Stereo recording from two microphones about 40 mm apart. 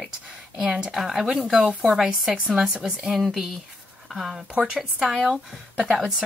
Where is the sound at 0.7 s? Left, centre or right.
Right.